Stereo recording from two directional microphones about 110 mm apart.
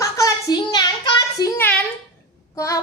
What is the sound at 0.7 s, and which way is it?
Child singing, 45° left (ahead or behind).